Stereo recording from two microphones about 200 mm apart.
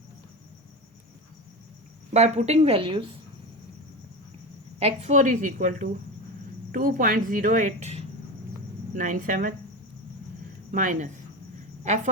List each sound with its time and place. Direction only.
2.1 s a woman's voice: 35° right (ahead or behind)
4.8 s a woman's voice: 30° right (ahead or behind)
10.7 s a woman's voice: 40° right (ahead or behind)